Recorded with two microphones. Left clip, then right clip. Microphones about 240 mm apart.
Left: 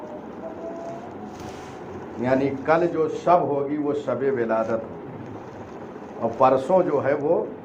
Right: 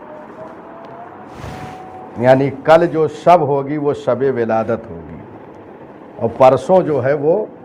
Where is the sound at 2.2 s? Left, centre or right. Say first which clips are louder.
Right 10 dB; right.